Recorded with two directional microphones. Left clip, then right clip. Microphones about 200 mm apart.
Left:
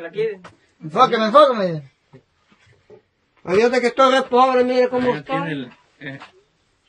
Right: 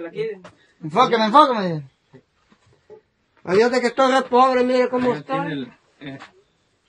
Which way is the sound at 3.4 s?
5° right (ahead or behind).